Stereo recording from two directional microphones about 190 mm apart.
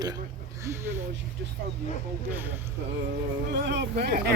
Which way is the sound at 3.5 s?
65° right (ahead or behind).